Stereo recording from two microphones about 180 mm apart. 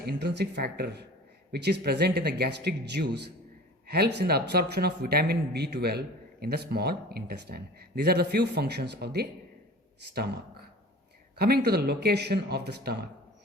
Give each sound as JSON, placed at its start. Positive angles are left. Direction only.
{"t": 0.0, "sound": "speech", "side_deg": -65}